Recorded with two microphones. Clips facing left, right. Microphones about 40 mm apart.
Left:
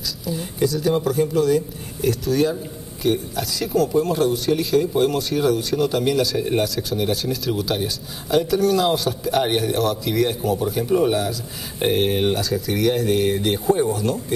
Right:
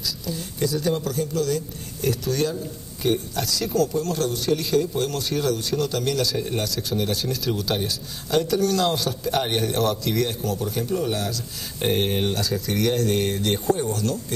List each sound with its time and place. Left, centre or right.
0.2 s speech: centre
2.0 s speech: centre
3.7 s a man's voice: centre
6.7 s a man's voice: centre
11.8 s a man's voice: centre